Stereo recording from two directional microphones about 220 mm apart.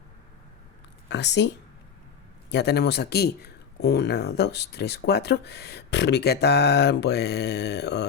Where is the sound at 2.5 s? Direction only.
50° left (ahead or behind).